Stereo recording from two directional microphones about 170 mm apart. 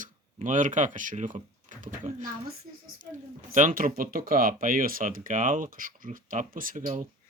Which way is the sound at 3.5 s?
50° right (ahead or behind).